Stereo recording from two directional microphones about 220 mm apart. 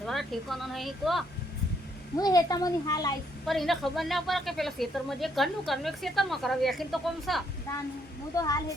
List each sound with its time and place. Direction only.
0.0 s speech: centre (ahead or behind)
2.1 s a woman's voice: 15° left (ahead or behind)
3.4 s speech: centre (ahead or behind)
8.4 s a woman's voice: 15° left (ahead or behind)